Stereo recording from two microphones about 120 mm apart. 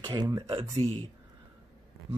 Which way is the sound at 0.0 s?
35° right (ahead or behind).